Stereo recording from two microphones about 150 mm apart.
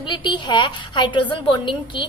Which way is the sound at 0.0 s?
30° left (ahead or behind).